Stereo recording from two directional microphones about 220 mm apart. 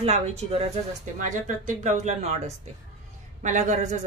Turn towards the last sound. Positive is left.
turn(degrees=-35)  # may be behind; listen again after turning